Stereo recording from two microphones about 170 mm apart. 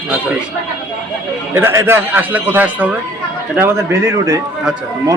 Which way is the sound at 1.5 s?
15° right (ahead or behind).